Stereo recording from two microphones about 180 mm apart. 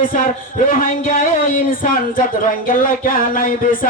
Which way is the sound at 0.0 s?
50° left (ahead or behind).